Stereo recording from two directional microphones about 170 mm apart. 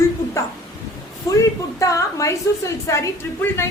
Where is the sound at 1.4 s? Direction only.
20° left (ahead or behind).